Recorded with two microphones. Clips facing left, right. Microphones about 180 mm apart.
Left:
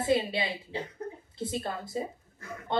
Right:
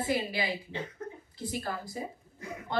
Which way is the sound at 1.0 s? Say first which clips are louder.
Left 2 dB; 35° left (ahead or behind).